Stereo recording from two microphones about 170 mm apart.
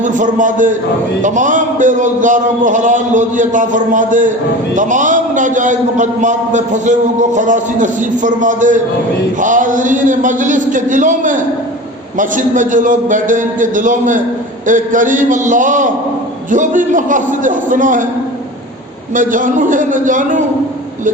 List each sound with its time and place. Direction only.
0.0 s a man's voice: 50° right (ahead or behind)
19.1 s a man's voice: 50° right (ahead or behind)